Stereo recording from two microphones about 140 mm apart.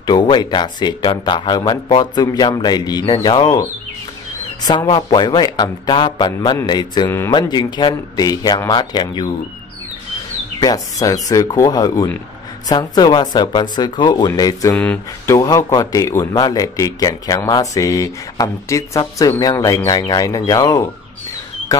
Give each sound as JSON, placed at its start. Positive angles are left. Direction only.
{"t": 0.0, "sound": "speech", "side_deg": 30}
{"t": 4.8, "sound": "speech", "side_deg": 45}
{"t": 5.2, "sound": "speech", "side_deg": 30}
{"t": 7.1, "sound": "speech", "side_deg": 20}
{"t": 7.3, "sound": "speech", "side_deg": 30}
{"t": 10.6, "sound": "speech", "side_deg": 25}